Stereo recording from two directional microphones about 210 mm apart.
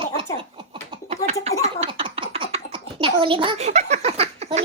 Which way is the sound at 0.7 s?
30° right (ahead or behind).